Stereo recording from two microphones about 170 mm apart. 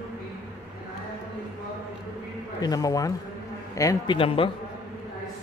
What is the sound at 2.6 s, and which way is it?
A man's voice, 20° left (ahead or behind).